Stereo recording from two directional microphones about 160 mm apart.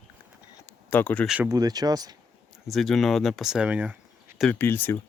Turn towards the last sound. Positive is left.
turn(degrees=15)  # may be behind; listen again after turning